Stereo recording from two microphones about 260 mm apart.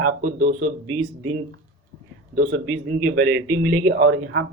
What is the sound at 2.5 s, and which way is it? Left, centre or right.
A man's voice, right.